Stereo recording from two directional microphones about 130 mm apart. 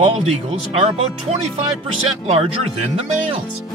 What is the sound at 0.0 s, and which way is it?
Speech, 60° right (ahead or behind).